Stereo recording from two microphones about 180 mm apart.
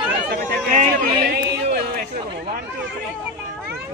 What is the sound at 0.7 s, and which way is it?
Speech, 40° right (ahead or behind).